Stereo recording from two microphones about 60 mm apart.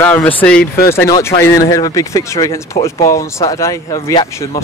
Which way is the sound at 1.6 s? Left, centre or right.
Left.